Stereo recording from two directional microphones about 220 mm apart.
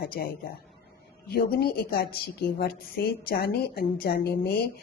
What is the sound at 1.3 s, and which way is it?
A woman's voice, 45° left (ahead or behind).